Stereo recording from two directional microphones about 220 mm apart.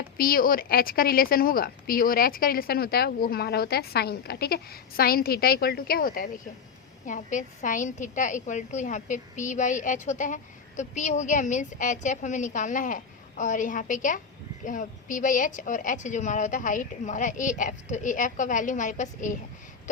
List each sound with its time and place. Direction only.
0.2 s a woman's voice: 40° left (ahead or behind)